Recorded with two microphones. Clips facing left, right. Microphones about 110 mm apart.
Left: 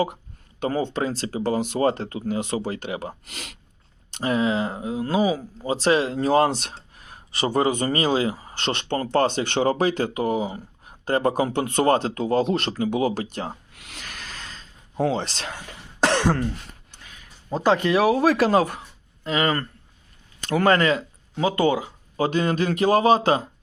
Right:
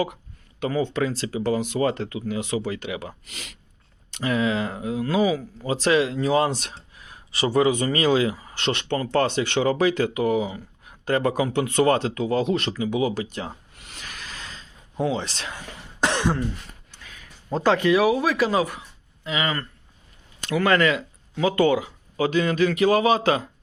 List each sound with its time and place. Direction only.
0.6 s speech: 30° left (ahead or behind); by 3.6 s 50° left (ahead or behind)
4.1 s speech: 30° left (ahead or behind)
13.7 s snake: 70° left (ahead or behind); by 14.4 s 50° left (ahead or behind)
15.1 s speech: 65° left (ahead or behind)
17.5 s speech: 15° left (ahead or behind)
17.8 s speech: 30° left (ahead or behind)
22.3 s speech: 40° left (ahead or behind)